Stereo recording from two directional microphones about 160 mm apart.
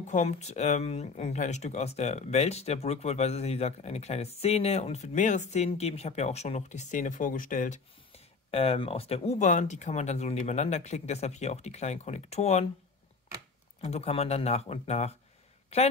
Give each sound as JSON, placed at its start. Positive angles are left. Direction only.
{"t": 0.0, "sound": "speech", "side_deg": 50}
{"t": 13.7, "sound": "speech", "side_deg": 40}